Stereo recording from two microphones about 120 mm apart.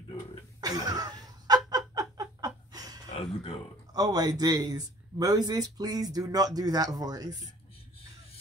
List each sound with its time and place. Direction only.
0.6 s cough: 35° right (ahead or behind)
1.7 s laughter: 30° right (ahead or behind)
3.1 s a sound: 55° left (ahead or behind)
3.9 s speech: 35° right (ahead or behind)